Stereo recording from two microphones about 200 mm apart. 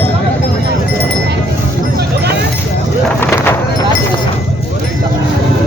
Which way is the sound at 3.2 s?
10° left (ahead or behind).